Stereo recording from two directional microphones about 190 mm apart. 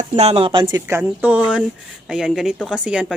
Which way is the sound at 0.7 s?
15° right (ahead or behind).